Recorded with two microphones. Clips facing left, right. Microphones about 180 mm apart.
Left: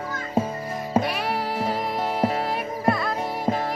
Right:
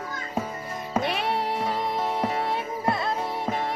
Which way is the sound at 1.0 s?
25° right (ahead or behind).